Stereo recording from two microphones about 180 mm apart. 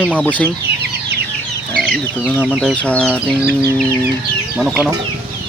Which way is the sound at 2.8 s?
5° left (ahead or behind).